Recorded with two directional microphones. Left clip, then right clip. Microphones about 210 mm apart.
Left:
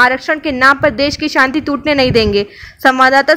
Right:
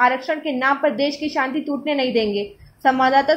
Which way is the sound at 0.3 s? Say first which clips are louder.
Left 9 dB; 25° left (ahead or behind).